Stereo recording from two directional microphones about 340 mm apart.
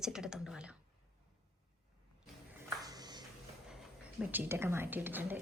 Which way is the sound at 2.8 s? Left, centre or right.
Centre.